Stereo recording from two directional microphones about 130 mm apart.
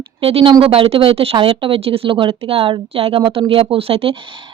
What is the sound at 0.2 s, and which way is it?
Speech, 45° right (ahead or behind).